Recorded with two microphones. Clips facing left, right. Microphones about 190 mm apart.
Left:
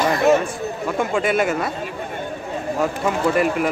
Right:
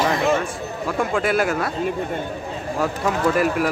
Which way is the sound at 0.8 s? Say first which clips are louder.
Even; centre (ahead or behind).